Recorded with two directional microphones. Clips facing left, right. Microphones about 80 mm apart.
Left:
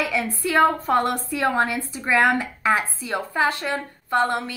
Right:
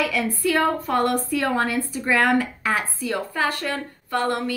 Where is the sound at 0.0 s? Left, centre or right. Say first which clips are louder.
Right 2 dB; left.